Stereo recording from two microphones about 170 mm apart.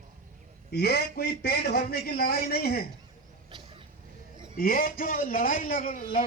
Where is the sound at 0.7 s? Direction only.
70° left (ahead or behind).